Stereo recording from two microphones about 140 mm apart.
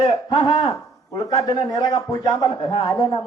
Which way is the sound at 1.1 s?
25° left (ahead or behind).